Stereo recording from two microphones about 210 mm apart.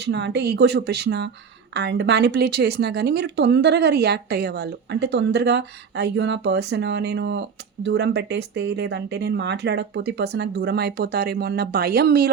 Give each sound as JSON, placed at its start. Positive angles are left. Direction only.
{"t": 0.0, "sound": "speech", "side_deg": -55}